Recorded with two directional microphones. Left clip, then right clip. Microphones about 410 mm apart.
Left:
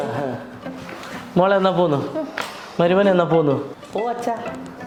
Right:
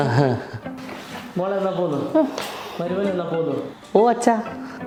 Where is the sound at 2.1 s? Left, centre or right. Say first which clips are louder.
Right 8 dB; right.